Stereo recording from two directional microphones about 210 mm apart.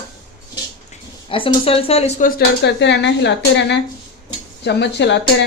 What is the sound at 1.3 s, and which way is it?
A woman's voice, 25° left (ahead or behind).